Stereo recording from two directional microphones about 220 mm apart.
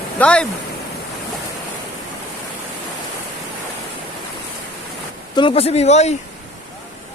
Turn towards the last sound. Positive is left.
turn(degrees=30)  # may be behind; listen again after turning